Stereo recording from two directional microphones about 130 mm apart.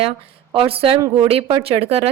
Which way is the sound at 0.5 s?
45° right (ahead or behind).